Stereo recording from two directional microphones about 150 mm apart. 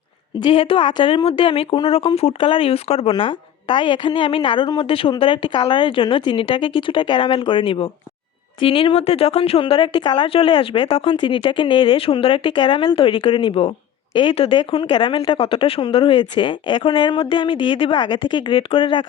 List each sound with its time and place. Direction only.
0.3 s speech: 35° left (ahead or behind)